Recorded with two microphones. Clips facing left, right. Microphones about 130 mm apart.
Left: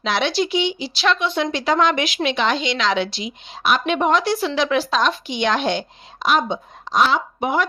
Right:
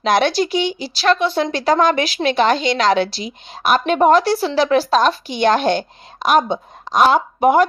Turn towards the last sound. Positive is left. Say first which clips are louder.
# right 7 dB
turn(degrees=-50)  # may be behind; listen again after turning